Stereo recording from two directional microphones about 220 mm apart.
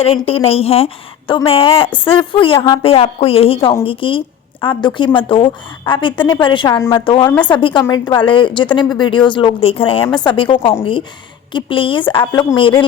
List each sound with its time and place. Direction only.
0.0 s speech: 25° left (ahead or behind)